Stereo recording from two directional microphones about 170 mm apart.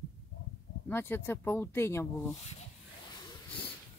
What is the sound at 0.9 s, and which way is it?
Speech, 15° left (ahead or behind).